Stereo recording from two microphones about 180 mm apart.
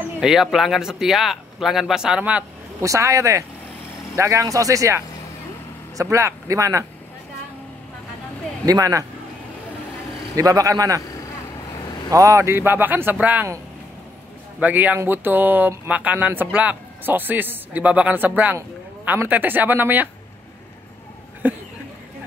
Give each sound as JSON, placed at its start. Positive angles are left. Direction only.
{"t": 0.2, "sound": "speech", "side_deg": 0}
{"t": 8.6, "sound": "a man's voice", "side_deg": -20}
{"t": 10.3, "sound": "a man's voice", "side_deg": -20}
{"t": 12.1, "sound": "speech", "side_deg": -20}
{"t": 14.6, "sound": "speech", "side_deg": -10}
{"t": 21.4, "sound": "a sound", "side_deg": -10}